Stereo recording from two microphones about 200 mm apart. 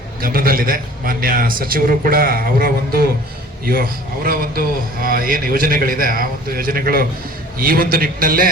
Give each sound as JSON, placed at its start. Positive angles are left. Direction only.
{"t": 0.2, "sound": "a man's voice", "side_deg": -45}